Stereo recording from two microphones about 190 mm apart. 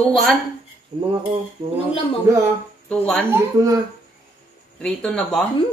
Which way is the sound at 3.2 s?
15° right (ahead or behind).